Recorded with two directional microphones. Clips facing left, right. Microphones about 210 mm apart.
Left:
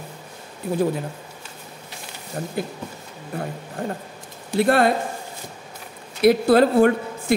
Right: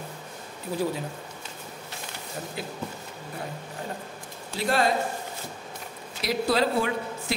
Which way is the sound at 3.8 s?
55° left (ahead or behind).